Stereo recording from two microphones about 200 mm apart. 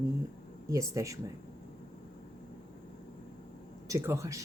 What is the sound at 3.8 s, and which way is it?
Speech, 15° right (ahead or behind).